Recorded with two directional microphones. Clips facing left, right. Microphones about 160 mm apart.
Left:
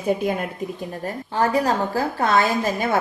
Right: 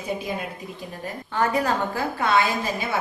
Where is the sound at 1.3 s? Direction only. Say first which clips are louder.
Left 3 dB; 30° left (ahead or behind); by 3.0 s 45° left (ahead or behind).